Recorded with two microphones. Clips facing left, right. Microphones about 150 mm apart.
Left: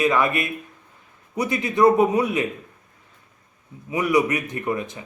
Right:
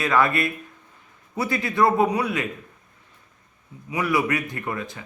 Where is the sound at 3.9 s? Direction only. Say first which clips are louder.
Left 3 dB; 20° left (ahead or behind).